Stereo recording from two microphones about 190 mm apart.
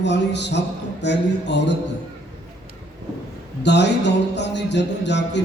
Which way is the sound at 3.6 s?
65° left (ahead or behind).